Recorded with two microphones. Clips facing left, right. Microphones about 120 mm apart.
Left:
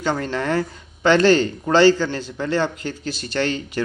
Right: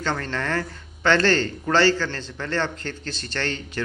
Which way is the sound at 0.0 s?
10° left (ahead or behind).